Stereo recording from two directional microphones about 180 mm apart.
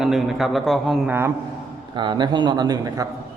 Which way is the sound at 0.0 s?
Centre (ahead or behind).